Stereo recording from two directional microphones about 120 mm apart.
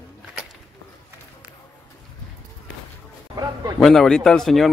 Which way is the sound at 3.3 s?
30° right (ahead or behind).